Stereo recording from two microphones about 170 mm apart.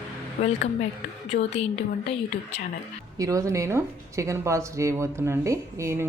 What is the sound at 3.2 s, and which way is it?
Speech, 20° right (ahead or behind).